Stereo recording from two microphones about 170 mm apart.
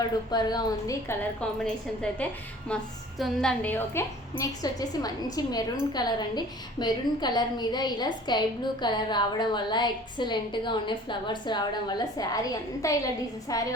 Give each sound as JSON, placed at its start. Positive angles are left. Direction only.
{"t": 0.3, "sound": "a woman's voice", "side_deg": 25}
{"t": 1.4, "sound": "a woman's voice", "side_deg": 5}